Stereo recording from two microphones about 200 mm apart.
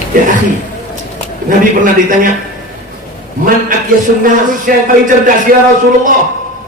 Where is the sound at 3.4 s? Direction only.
45° right (ahead or behind).